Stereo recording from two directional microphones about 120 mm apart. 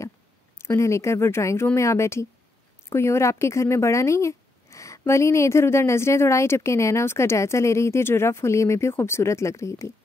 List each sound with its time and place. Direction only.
0.6 s speech: 20° left (ahead or behind)